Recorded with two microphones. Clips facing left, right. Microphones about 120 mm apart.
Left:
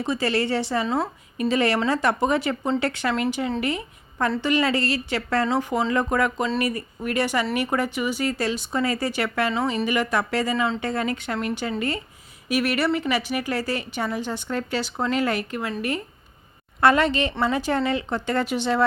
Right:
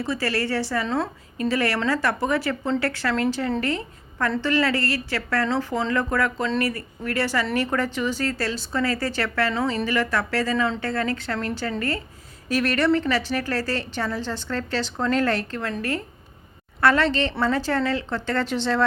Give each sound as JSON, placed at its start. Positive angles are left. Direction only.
{"t": 0.0, "sound": "a woman's voice", "side_deg": 20}
{"t": 9.5, "sound": "speech", "side_deg": 5}
{"t": 9.8, "sound": "a woman's voice", "side_deg": 15}
{"t": 16.8, "sound": "a woman's voice", "side_deg": 15}